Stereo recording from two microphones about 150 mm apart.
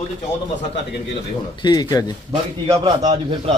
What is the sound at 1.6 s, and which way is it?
Speech, 25° left (ahead or behind).